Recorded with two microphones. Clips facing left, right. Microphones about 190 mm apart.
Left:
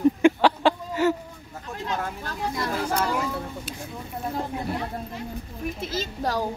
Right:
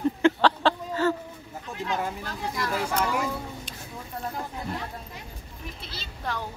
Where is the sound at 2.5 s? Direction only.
30° left (ahead or behind).